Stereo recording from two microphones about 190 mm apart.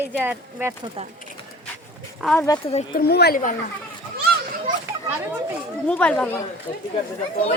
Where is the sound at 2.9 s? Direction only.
55° left (ahead or behind).